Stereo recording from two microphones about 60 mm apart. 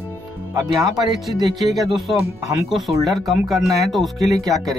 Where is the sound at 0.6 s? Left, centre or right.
Right.